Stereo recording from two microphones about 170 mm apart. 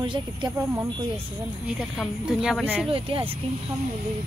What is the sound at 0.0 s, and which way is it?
Speech, 25° right (ahead or behind).